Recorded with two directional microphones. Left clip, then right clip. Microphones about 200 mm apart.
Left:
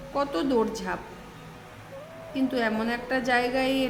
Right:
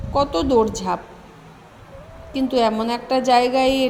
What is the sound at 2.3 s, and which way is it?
A woman's voice, 20° right (ahead or behind).